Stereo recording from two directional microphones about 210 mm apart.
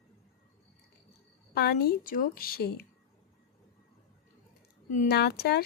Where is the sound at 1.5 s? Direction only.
50° left (ahead or behind).